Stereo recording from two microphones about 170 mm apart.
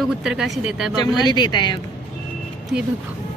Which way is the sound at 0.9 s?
25° left (ahead or behind).